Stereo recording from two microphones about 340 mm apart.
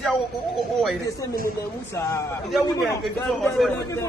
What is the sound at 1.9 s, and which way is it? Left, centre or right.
Speech, centre.